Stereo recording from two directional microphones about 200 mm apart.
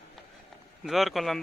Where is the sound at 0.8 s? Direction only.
Centre (ahead or behind).